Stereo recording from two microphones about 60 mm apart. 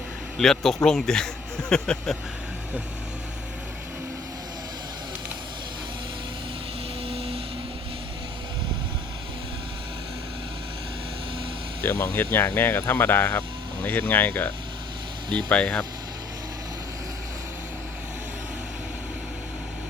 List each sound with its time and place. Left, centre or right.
0.3 s speech: centre
11.8 s speech: left
15.4 s speech: centre